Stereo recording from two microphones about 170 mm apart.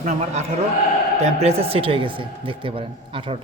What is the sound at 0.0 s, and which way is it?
A man's voice, 40° right (ahead or behind).